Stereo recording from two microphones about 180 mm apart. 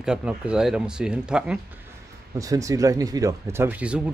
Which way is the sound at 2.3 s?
20° right (ahead or behind).